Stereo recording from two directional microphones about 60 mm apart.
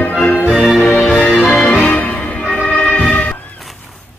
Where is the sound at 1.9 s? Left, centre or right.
Left.